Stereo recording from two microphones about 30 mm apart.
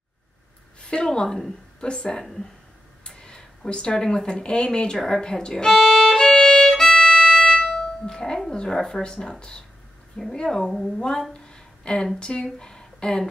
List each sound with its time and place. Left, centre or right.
0.7 s a woman's voice: left
3.1 s a sound: left
4.4 s speech: left
4.9 s speech: centre
5.2 s speech: left
5.8 s violin: centre
6.0 s violin: left
6.9 s music: centre
8.2 s a woman's voice: centre
11.5 s a sound: left
12.2 s speech: left
12.5 s a sound: left